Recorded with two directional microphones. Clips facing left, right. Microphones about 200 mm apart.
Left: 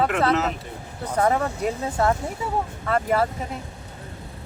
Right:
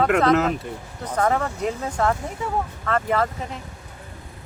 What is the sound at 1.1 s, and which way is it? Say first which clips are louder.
Speech: even; 10° left (ahead or behind).